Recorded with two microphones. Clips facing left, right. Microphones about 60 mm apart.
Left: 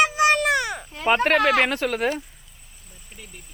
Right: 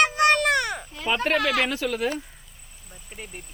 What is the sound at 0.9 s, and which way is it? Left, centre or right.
Speech, left.